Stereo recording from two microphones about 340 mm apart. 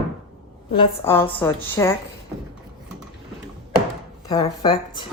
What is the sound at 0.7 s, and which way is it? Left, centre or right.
A woman's voice, centre.